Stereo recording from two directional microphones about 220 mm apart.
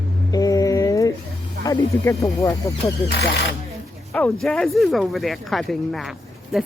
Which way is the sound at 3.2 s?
50° left (ahead or behind).